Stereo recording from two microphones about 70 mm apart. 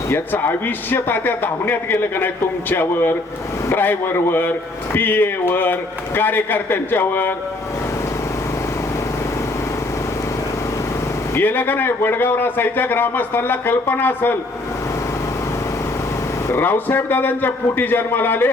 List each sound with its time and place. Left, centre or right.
0.1 s a man's voice: left
11.3 s a man's voice: left
16.5 s a man's voice: left